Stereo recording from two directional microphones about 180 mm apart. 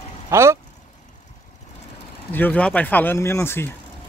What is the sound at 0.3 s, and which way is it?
Speech, 15° right (ahead or behind).